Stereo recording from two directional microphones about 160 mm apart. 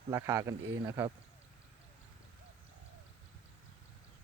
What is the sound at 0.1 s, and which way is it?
Speech, 20° right (ahead or behind).